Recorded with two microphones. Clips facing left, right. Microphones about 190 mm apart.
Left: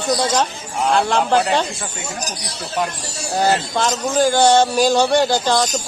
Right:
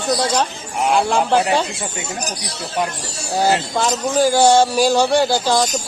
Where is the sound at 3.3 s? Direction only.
10° right (ahead or behind).